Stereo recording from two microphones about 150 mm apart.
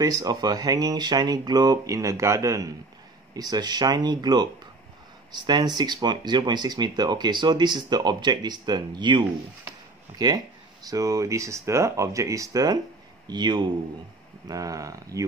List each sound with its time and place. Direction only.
0.0 s speech: 25° right (ahead or behind)